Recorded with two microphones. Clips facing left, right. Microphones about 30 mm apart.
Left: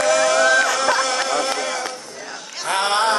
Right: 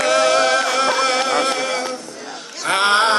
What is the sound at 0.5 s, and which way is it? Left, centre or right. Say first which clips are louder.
Music: even; right.